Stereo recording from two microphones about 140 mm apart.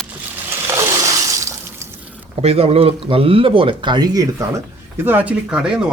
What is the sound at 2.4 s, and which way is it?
Speech, 45° right (ahead or behind).